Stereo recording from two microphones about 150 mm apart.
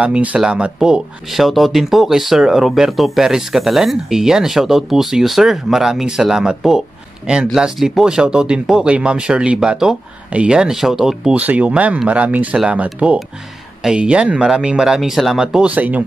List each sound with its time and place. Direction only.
0.0 s speech: 10° right (ahead or behind)